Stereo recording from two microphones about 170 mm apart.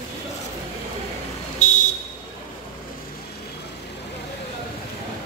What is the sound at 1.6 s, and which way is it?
Vehicle, 45° left (ahead or behind).